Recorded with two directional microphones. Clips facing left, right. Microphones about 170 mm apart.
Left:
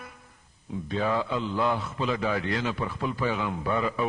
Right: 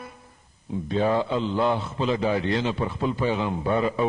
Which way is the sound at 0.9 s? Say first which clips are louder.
Right 4 dB; 30° right (ahead or behind).